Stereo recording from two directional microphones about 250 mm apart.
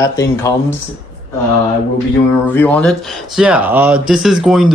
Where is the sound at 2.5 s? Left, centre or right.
Centre.